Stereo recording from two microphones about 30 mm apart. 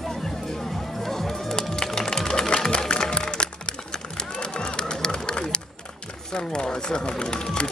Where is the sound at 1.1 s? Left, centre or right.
Centre.